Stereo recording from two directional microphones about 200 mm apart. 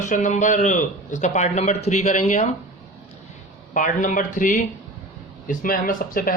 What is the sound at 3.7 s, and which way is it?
A man's voice, 40° left (ahead or behind).